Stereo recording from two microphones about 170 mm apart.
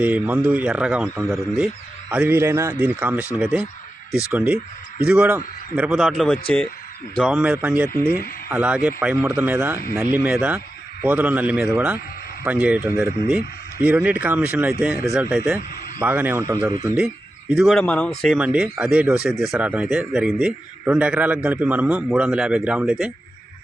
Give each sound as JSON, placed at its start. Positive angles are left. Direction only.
{"t": 0.0, "sound": "a man's voice", "side_deg": -10}
{"t": 17.5, "sound": "a man's voice", "side_deg": 0}